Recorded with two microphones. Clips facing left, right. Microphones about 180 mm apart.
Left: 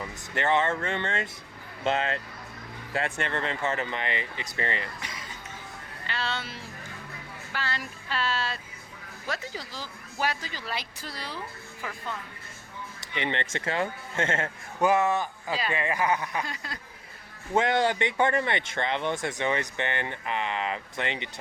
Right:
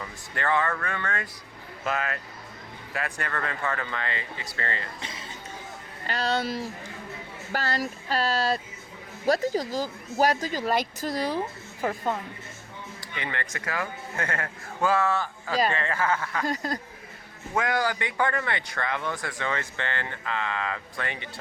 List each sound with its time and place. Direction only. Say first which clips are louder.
0.0 s speech: left 2 dB; 20° left (ahead or behind)
4.9 s a sound: right 1 dB; 25° right (ahead or behind)
6.1 s speech: right 7 dB; 40° right (ahead or behind)
13.0 s speech: left 4 dB; 25° left (ahead or behind)
16.5 s speech: right 10 dB; 45° right (ahead or behind)
17.5 s speech: left 2 dB; 25° left (ahead or behind)